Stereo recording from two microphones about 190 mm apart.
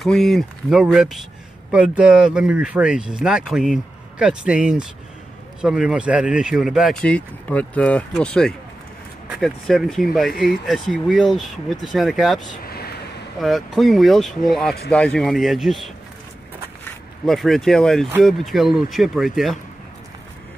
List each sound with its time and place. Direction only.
0.0 s speech: centre (ahead or behind)
12.6 s a sound: 55° left (ahead or behind)
13.4 s speech: centre (ahead or behind)